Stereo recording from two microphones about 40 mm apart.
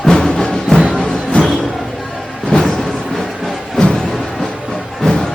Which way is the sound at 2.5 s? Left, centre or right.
Left.